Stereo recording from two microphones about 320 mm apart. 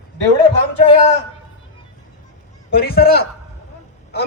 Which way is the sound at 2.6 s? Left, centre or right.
Left.